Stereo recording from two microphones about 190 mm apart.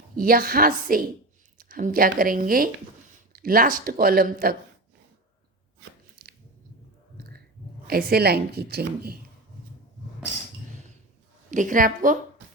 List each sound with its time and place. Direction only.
0.2 s speech: 50° right (ahead or behind)
6.2 s biting: 55° right (ahead or behind)
7.9 s speech: 55° right (ahead or behind)
11.5 s speech: 45° right (ahead or behind)